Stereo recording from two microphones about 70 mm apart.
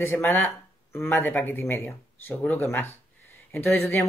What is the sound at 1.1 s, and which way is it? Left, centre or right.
Speech, left.